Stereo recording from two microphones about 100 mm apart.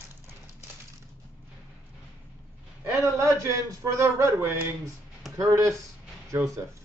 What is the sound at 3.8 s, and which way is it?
Speech, 30° right (ahead or behind).